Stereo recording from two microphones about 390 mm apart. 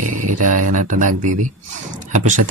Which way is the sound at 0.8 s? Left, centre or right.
Centre.